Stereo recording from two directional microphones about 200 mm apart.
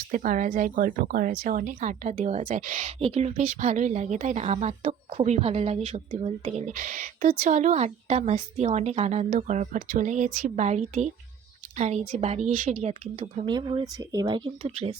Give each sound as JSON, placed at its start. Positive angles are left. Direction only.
{"t": 0.1, "sound": "a woman's voice", "side_deg": -40}
{"t": 14.6, "sound": "a woman's voice", "side_deg": -30}